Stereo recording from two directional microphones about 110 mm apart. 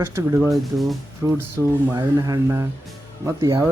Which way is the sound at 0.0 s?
25° right (ahead or behind).